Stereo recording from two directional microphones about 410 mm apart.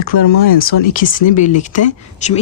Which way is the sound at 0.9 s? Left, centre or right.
Centre.